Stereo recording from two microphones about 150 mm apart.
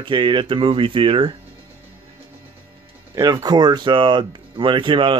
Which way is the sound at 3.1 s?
25° right (ahead or behind).